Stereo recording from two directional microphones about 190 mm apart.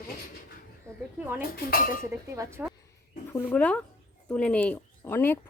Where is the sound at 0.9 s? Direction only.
15° right (ahead or behind).